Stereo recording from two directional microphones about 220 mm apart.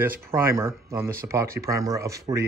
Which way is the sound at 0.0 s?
10° right (ahead or behind).